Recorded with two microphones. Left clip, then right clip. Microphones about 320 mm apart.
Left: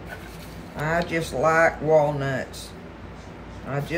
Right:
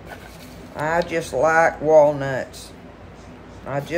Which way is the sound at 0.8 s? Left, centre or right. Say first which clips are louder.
Right 3 dB; centre.